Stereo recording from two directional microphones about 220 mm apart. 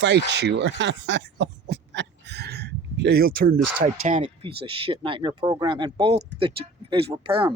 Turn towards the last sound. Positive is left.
turn(degrees=-25)  # may be behind; listen again after turning